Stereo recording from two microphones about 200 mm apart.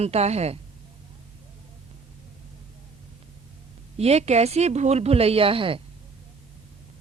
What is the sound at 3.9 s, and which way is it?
Speech, 30° right (ahead or behind).